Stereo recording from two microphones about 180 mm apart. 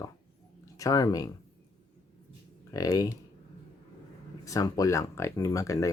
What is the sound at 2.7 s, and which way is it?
Speech, 20° left (ahead or behind).